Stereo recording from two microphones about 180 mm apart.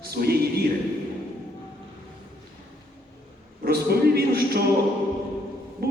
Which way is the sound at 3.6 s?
60° right (ahead or behind).